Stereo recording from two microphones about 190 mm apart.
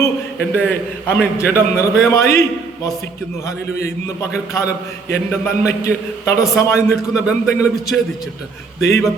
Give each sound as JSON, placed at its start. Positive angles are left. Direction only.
{"t": 0.3, "sound": "a man's voice", "side_deg": 5}
{"t": 3.4, "sound": "a man's voice", "side_deg": 15}
{"t": 6.9, "sound": "speech", "side_deg": -5}
{"t": 8.8, "sound": "a man's voice", "side_deg": 15}